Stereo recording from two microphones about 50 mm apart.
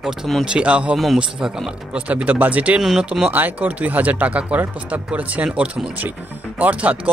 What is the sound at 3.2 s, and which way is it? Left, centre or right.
Speech, right.